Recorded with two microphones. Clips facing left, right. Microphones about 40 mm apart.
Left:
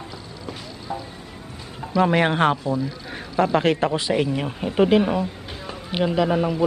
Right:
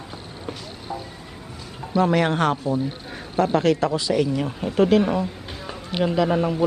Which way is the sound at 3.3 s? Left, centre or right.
Left.